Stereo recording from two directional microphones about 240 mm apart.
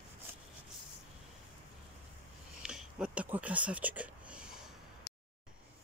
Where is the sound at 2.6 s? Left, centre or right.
Centre.